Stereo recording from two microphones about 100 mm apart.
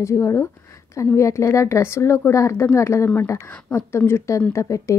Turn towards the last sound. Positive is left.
turn(degrees=30)  # may be behind; listen again after turning